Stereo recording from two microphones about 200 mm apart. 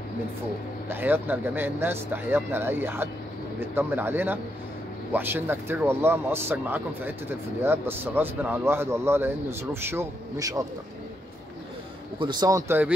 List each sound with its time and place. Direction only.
0.8 s speech: 10° right (ahead or behind)
12.2 s speech: 20° right (ahead or behind)